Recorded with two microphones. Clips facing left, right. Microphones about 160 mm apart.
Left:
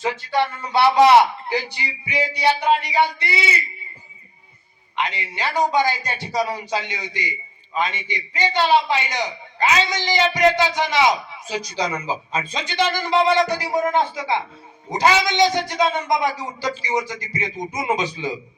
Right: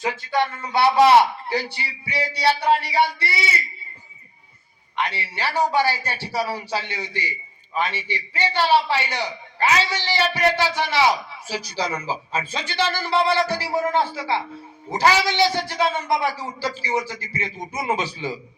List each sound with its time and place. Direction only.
0.0 s a man's voice: 25° left (ahead or behind)
4.9 s a man's voice: 15° left (ahead or behind)